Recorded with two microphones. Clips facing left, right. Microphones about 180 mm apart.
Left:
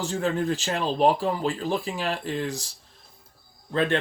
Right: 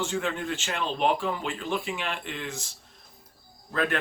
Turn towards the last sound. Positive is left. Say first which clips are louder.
# left 4 dB
turn(degrees=30)  # may be behind; listen again after turning